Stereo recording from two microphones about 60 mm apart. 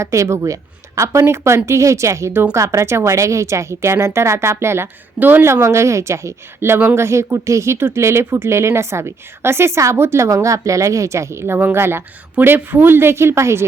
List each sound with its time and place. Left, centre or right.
0.0 s a woman's voice: right
2.3 s speech: right
2.6 s speech: right
5.2 s speech: right
5.5 s speech: right
6.7 s speech: right
10.2 s speech: right